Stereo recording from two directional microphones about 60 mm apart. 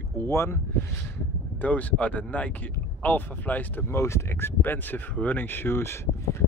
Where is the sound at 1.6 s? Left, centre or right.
Left.